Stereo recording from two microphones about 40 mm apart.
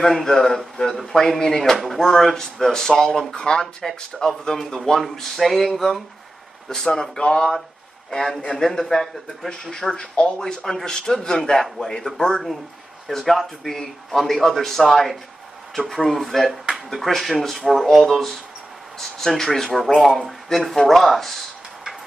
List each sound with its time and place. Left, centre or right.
0.0 s speech: centre
4.3 s speech: centre; by 7.5 s left
8.5 s speech: centre
12.2 s speech: centre
13.1 s speech: centre
19.7 s speech: centre